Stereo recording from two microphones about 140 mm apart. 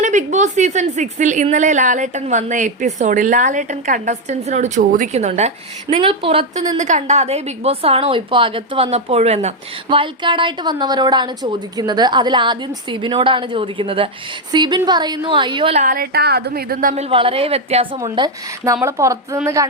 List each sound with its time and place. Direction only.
0.0 s a woman's voice: 60° right (ahead or behind)
5.1 s a woman's voice: 55° right (ahead or behind)
6.0 s a woman's voice: 40° right (ahead or behind)
6.7 s a woman's voice: 60° right (ahead or behind)
9.9 s a woman's voice: 35° right (ahead or behind)
15.7 s a woman's voice: 55° right (ahead or behind)
16.0 s a woman's voice: 90° right
16.9 s a woman's voice: 45° right (ahead or behind)
17.9 s a woman's voice: 30° right (ahead or behind)